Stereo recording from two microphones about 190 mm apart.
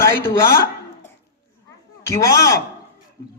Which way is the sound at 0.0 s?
15° left (ahead or behind).